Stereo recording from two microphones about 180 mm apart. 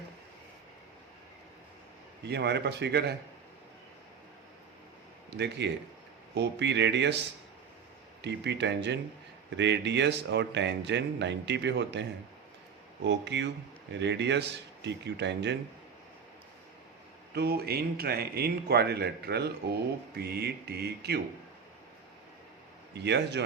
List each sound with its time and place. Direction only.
2.2 s speech: 70° right (ahead or behind)
5.4 s speech: 70° right (ahead or behind)
8.2 s speech: 75° right (ahead or behind)
17.3 s speech: 60° right (ahead or behind)
23.0 s speech: 70° right (ahead or behind)